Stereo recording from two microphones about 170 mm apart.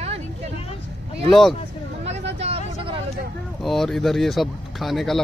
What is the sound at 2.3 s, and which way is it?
Vehicle, 35° right (ahead or behind).